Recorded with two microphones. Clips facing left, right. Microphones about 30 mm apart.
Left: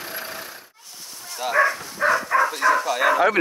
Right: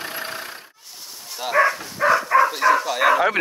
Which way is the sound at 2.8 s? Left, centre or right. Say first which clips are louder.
Right 1 dB; centre.